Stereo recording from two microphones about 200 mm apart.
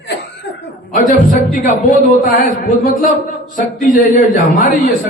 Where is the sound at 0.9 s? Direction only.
40° left (ahead or behind).